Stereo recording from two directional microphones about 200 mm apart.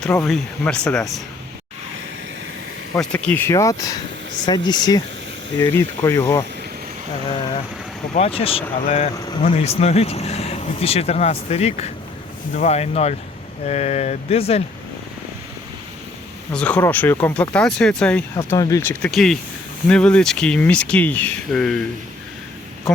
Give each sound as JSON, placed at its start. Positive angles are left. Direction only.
{"t": 0.0, "sound": "speech", "side_deg": 5}
{"t": 2.9, "sound": "speech", "side_deg": 5}
{"t": 8.1, "sound": "speech", "side_deg": 30}
{"t": 16.5, "sound": "speech", "side_deg": 5}
{"t": 18.5, "sound": "speech", "side_deg": 15}